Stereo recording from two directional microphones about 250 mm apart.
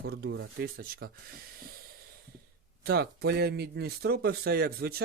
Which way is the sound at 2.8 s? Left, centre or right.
Right.